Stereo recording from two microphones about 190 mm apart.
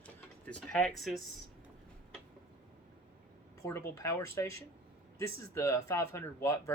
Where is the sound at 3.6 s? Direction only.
15° left (ahead or behind).